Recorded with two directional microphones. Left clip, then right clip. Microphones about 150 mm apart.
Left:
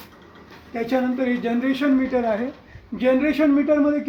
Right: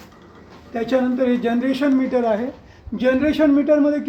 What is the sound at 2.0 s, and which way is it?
Speech, 10° left (ahead or behind).